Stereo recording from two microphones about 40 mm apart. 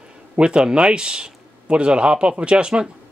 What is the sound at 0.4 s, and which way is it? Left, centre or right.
Speech, right.